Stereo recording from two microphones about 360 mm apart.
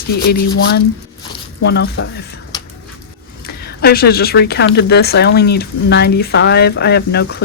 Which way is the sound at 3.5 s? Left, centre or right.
Left.